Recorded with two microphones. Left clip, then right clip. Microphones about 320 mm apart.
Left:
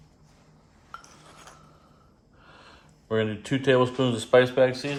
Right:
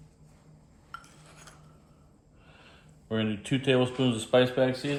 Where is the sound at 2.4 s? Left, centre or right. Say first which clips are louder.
Left 4 dB; left.